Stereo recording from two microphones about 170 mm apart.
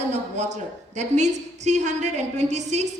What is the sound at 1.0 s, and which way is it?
A woman's voice, 45° right (ahead or behind).